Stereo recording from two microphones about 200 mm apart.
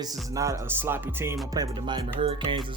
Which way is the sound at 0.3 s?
15° right (ahead or behind).